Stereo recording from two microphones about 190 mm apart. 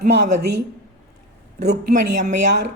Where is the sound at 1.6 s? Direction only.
55° right (ahead or behind).